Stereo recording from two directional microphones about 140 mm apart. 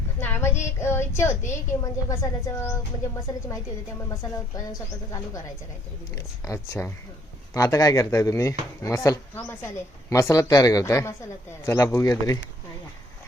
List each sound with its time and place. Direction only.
0.2 s child singing: 15° left (ahead or behind)
0.6 s speech: 20° left (ahead or behind)
4.1 s speech: 25° left (ahead or behind)
6.1 s speech: 20° left (ahead or behind)